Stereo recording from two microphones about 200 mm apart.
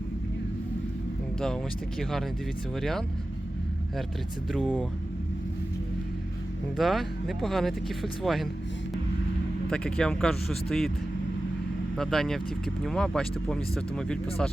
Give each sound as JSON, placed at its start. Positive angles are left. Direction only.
{"t": 2.0, "sound": "speech", "side_deg": 0}
{"t": 4.5, "sound": "speech", "side_deg": 0}
{"t": 6.7, "sound": "speech", "side_deg": 0}
{"t": 9.6, "sound": "speech", "side_deg": 5}
{"t": 11.9, "sound": "speech", "side_deg": 0}